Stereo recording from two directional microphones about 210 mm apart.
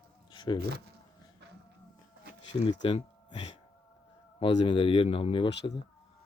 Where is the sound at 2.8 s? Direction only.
25° left (ahead or behind).